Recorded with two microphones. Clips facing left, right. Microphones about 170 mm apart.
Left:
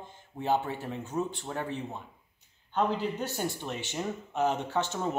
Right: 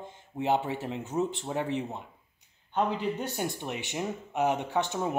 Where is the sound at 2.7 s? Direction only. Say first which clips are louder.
Even; 15° right (ahead or behind).